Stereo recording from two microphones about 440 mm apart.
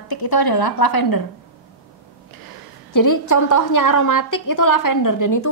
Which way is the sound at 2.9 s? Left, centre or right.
Left.